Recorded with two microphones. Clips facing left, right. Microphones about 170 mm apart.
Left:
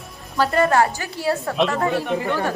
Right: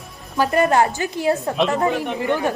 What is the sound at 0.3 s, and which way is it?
A woman's voice, 15° right (ahead or behind).